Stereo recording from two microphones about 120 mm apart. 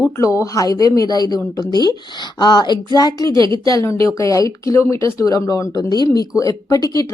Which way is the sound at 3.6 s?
25° left (ahead or behind).